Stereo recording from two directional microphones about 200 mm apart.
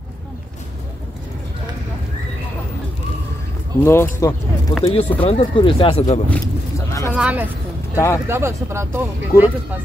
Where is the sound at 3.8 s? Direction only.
10° left (ahead or behind).